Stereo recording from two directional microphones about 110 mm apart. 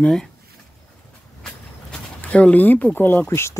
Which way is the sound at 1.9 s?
10° left (ahead or behind).